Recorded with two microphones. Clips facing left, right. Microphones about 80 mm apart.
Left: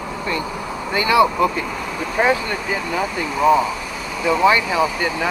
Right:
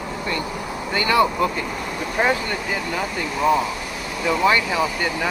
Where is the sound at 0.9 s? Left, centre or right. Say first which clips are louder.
Left 3 dB; centre.